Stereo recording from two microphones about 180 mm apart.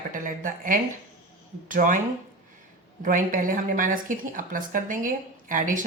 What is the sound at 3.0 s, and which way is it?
Speech, 45° right (ahead or behind).